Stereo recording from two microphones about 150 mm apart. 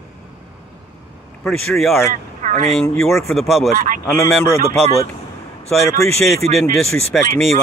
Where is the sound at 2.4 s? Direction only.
55° right (ahead or behind).